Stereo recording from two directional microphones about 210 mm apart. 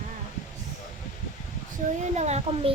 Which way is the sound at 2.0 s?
30° right (ahead or behind).